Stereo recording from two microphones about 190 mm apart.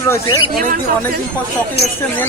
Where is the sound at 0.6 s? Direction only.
50° right (ahead or behind).